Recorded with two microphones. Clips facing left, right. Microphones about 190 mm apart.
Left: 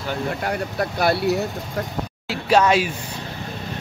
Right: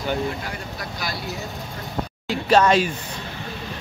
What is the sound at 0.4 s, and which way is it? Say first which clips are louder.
Speech: left 8 dB; 60° left (ahead or behind).